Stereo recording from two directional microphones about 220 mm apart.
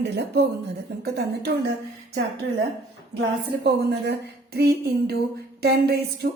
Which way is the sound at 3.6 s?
45° right (ahead or behind).